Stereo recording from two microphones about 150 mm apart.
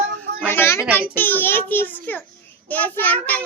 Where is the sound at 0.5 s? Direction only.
15° left (ahead or behind).